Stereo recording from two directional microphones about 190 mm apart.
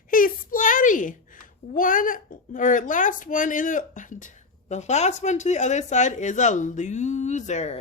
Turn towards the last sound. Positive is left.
turn(degrees=35)  # may be behind; listen again after turning